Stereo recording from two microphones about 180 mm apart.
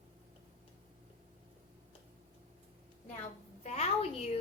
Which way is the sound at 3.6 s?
35° left (ahead or behind).